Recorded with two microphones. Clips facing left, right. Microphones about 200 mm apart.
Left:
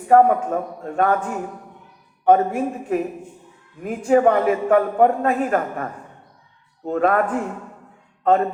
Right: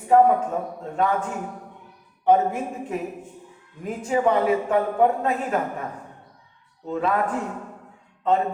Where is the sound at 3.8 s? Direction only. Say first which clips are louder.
Left 6 dB; 55° left (ahead or behind).